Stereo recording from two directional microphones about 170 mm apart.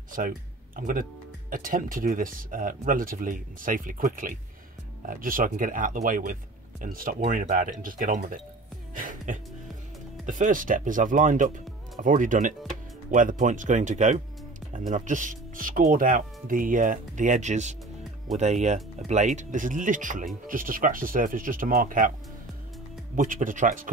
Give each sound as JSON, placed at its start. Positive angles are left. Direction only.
{"t": 0.7, "sound": "speech", "side_deg": -55}
{"t": 8.9, "sound": "music", "side_deg": -50}
{"t": 10.2, "sound": "speech", "side_deg": -50}
{"t": 23.1, "sound": "speech", "side_deg": -50}